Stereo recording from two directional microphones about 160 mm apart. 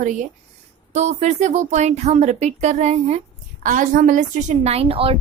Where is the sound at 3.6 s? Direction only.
55° right (ahead or behind); by 5.2 s 35° right (ahead or behind).